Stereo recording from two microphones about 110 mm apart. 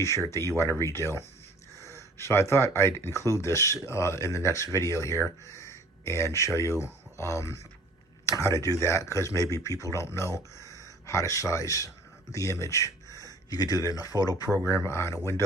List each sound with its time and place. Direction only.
0.3 s speech: 25° left (ahead or behind)
14.6 s speech: 25° left (ahead or behind)